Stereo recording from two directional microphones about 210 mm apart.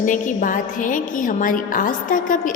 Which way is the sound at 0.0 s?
40° left (ahead or behind).